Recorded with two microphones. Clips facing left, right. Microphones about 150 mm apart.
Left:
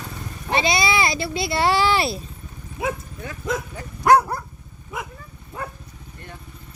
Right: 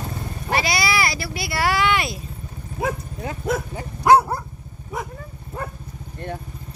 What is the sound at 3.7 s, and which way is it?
Dog, 20° right (ahead or behind).